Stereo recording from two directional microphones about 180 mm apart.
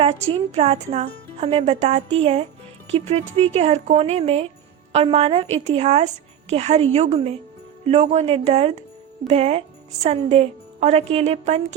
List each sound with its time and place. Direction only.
0.0 s speech: 35° right (ahead or behind)